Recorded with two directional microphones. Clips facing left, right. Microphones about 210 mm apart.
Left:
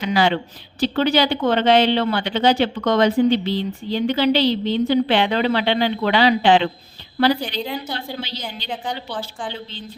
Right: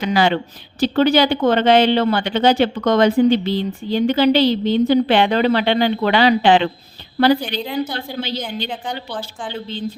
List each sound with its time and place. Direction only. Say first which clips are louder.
0.0 s speech: right 2 dB; 50° right (ahead or behind)
7.4 s a woman's voice: right 4 dB; centre (ahead or behind)
7.9 s speech: right 4 dB; 50° right (ahead or behind)
8.6 s a woman's voice: right 1 dB; centre (ahead or behind)